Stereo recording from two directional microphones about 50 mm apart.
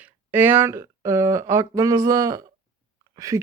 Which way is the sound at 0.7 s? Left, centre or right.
Right.